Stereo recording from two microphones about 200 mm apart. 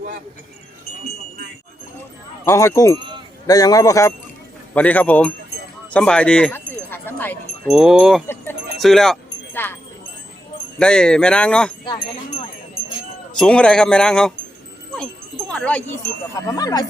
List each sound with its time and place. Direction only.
2.4 s speech: 15° left (ahead or behind)
3.0 s a sound: 25° right (ahead or behind)
3.4 s speech: 20° left (ahead or behind)
5.9 s wind chime: 5° left (ahead or behind)
7.7 s speech: 5° right (ahead or behind)
8.8 s wind chime: centre (ahead or behind)
10.8 s speech: 5° left (ahead or behind)
13.4 s speech: 5° left (ahead or behind)
15.5 s wind chime: 5° left (ahead or behind)
16.3 s speech: 15° left (ahead or behind)